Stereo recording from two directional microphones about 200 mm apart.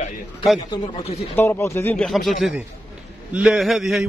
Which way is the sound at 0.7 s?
30° left (ahead or behind).